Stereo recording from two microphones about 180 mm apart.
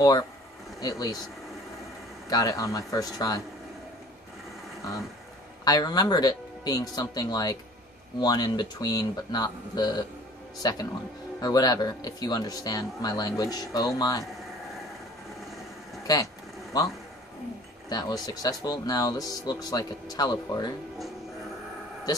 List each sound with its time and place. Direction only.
0.7 s speech: 20° left (ahead or behind)
2.2 s speech: 20° left (ahead or behind)
5.7 s speech: 20° left (ahead or behind)
16.1 s speech: 20° left (ahead or behind)